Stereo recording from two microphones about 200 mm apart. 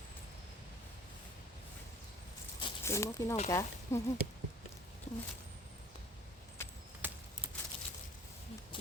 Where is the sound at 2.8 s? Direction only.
15° left (ahead or behind).